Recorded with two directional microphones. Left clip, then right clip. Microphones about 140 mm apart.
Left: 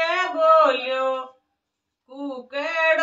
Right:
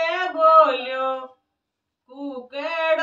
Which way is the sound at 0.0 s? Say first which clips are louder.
Right 1 dB; 10° left (ahead or behind).